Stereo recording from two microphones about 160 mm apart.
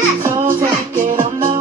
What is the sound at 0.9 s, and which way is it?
Music, 55° right (ahead or behind).